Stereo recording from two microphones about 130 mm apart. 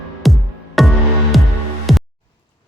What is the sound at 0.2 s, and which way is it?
Music, centre (ahead or behind).